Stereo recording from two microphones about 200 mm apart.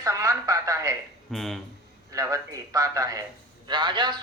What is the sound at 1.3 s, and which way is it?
Speech, centre (ahead or behind).